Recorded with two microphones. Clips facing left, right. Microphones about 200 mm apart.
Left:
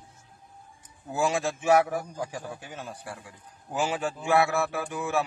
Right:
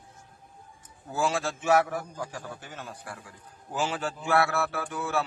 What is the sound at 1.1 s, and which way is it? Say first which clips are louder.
A man's voice: left 2 dB; 15° left (ahead or behind).